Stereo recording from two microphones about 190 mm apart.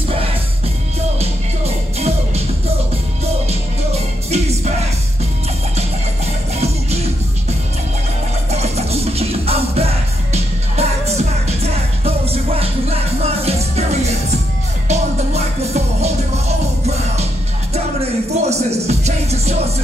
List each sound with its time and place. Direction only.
2.0 s music: 35° right (ahead or behind)
3.4 s music: 35° right (ahead or behind)
6.6 s music: 35° right (ahead or behind)
8.5 s music: 35° right (ahead or behind)